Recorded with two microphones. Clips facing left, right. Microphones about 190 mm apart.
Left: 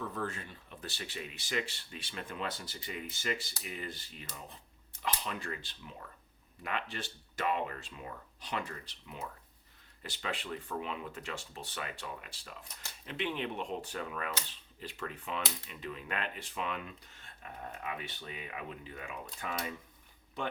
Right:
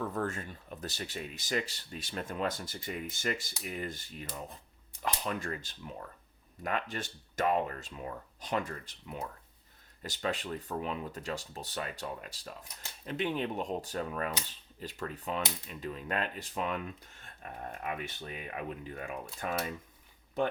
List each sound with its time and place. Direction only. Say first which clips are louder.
0.1 s speech: right 4 dB; 45° right (ahead or behind)